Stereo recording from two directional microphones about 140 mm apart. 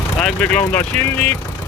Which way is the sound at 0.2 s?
10° left (ahead or behind).